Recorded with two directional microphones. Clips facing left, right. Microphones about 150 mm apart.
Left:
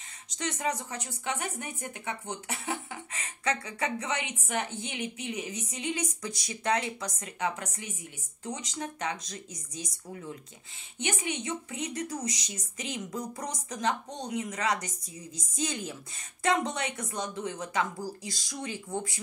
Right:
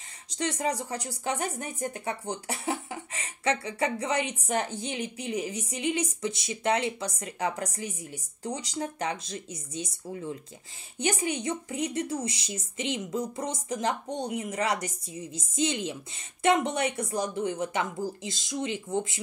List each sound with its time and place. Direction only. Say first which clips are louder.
0.4 s speech: right 3 dB; 30° right (ahead or behind)